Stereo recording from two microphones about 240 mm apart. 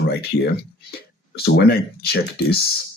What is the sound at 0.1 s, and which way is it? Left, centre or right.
Speech, left.